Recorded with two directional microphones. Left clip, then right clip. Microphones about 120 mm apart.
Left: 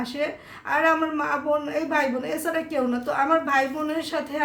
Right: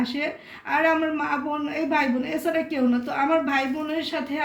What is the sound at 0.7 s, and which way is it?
A man's voice, 40° left (ahead or behind).